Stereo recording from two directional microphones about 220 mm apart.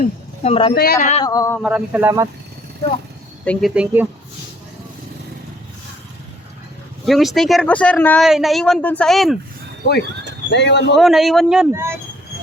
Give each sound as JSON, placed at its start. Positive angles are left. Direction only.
{"t": 0.4, "sound": "speech", "side_deg": 25}
{"t": 0.8, "sound": "speech", "side_deg": 40}
{"t": 1.2, "sound": "speech", "side_deg": 15}
{"t": 1.6, "sound": "speech", "side_deg": -5}
{"t": 3.4, "sound": "speech", "side_deg": 5}
{"t": 3.8, "sound": "speech", "side_deg": -5}
{"t": 7.0, "sound": "speech", "side_deg": 0}
{"t": 10.5, "sound": "speech", "side_deg": 50}
{"t": 10.9, "sound": "speech", "side_deg": 0}